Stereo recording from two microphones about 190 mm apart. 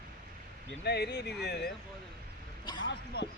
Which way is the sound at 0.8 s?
60° left (ahead or behind).